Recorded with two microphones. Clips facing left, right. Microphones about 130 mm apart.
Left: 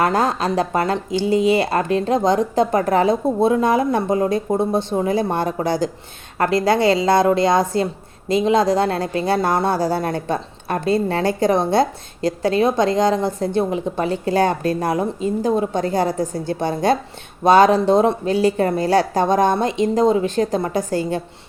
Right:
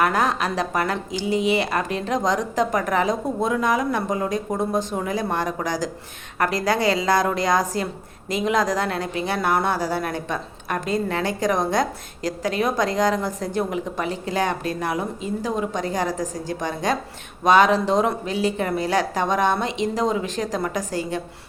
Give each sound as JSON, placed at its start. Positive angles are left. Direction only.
{"t": 0.0, "sound": "a woman's voice", "side_deg": 30}